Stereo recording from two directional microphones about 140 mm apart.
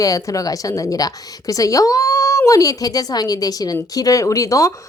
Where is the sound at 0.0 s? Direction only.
25° left (ahead or behind).